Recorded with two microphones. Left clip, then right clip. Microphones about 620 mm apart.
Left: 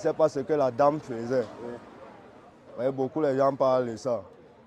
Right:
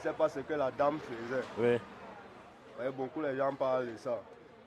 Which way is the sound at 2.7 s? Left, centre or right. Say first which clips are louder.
Left 9 dB; left.